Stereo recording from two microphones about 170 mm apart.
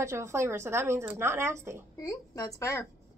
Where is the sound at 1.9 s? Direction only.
20° left (ahead or behind).